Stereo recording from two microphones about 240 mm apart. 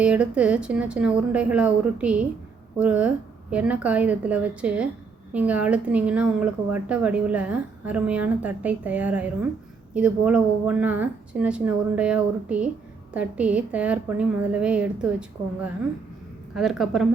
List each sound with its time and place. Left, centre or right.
0.0 s a woman's voice: centre
16.6 s a woman's voice: centre